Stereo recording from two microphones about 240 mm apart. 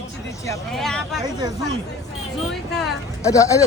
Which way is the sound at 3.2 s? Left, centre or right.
Centre.